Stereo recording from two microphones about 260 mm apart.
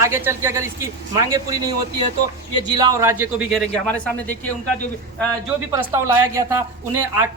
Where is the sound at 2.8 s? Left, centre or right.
Centre.